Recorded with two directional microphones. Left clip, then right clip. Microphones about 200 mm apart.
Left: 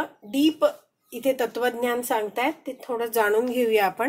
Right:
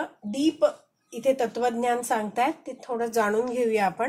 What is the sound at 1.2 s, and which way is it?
Speech, 40° left (ahead or behind).